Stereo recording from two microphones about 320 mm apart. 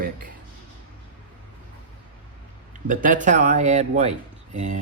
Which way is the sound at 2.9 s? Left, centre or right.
Right.